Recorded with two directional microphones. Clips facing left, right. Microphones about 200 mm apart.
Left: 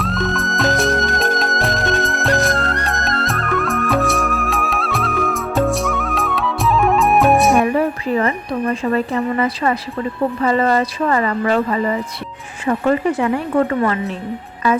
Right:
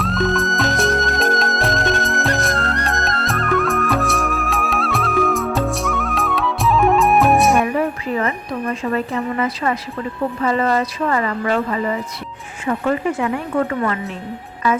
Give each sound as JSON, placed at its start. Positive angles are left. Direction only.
{"t": 0.0, "sound": "music", "side_deg": 0}
{"t": 8.2, "sound": "a sound", "side_deg": 35}
{"t": 10.4, "sound": "a woman's voice", "side_deg": 35}